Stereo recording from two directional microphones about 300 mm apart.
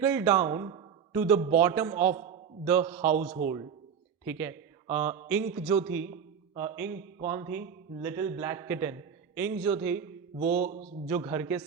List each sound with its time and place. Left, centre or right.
0.0 s a man's voice: centre
3.2 s speech: right
4.3 s a man's voice: centre
10.3 s speech: right
11.1 s a man's voice: centre